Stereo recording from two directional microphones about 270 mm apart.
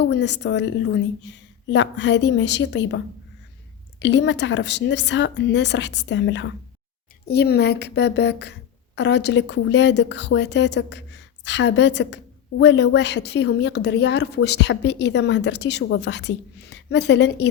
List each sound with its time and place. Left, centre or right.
0.1 s a woman's voice: left
4.0 s a woman's voice: left